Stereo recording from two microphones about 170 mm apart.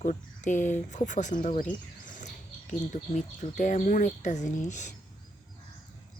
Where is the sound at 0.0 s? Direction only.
45° left (ahead or behind).